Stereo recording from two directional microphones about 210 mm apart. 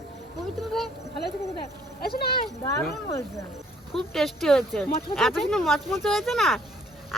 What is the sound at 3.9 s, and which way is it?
Speech, centre (ahead or behind).